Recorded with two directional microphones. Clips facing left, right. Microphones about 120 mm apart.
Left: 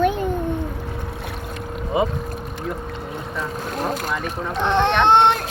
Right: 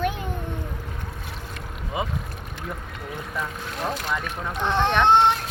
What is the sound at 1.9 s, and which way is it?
Speech, 25° left (ahead or behind).